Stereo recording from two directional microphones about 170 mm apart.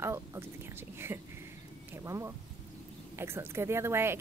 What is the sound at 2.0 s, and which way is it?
A woman's voice, 15° right (ahead or behind).